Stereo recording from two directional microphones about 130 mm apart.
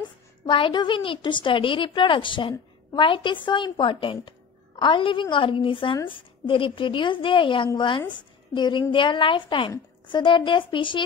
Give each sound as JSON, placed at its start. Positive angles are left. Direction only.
{"t": 0.5, "sound": "a woman's voice", "side_deg": 40}